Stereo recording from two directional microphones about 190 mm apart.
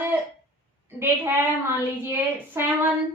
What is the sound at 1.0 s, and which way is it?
A woman's voice, 10° right (ahead or behind).